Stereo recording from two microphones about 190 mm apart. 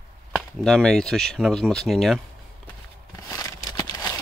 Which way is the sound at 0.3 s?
5° left (ahead or behind).